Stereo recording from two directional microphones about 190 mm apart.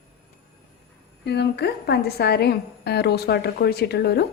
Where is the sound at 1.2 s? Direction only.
60° left (ahead or behind).